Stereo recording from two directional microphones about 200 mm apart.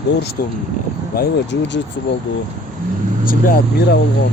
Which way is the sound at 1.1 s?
55° left (ahead or behind).